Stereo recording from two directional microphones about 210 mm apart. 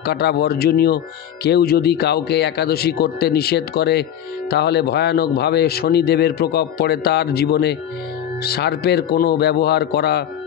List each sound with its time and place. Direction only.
0.0 s speech: 50° left (ahead or behind)